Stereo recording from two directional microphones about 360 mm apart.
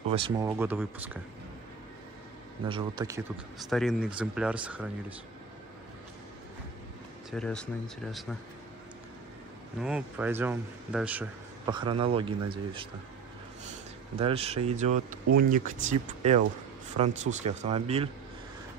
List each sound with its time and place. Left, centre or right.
0.1 s speech: centre
2.6 s speech: centre
3.7 s speech: centre
7.2 s speech: centre
9.8 s speech: centre
14.1 s speech: centre